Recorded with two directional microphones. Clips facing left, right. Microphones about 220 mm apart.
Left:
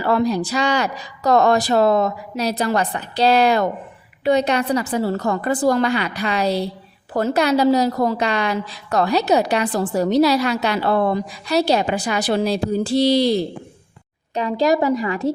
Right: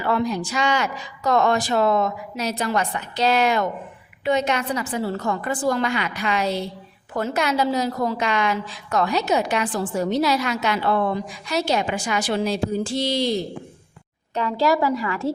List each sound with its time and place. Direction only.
0.0 s a woman's voice: 35° left (ahead or behind)
14.3 s a woman's voice: 15° left (ahead or behind)